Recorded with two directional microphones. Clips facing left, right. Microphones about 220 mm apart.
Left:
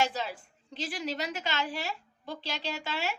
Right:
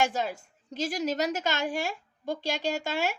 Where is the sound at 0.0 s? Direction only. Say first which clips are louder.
Right 3 dB; 45° right (ahead or behind).